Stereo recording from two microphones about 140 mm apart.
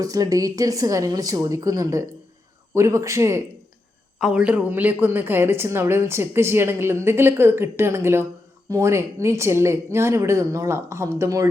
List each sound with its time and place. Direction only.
0.0 s a woman's voice: 25° right (ahead or behind)
4.2 s a woman's voice: 5° right (ahead or behind); by 11.4 s 20° right (ahead or behind)